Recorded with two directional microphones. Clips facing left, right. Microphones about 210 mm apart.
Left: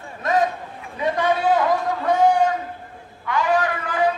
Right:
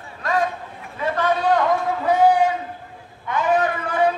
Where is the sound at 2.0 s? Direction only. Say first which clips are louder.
Right 1 dB; 5° right (ahead or behind).